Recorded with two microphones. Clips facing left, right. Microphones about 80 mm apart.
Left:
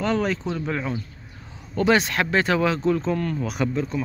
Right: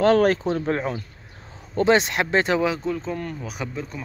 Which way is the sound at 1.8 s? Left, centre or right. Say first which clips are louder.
Right 1 dB; right.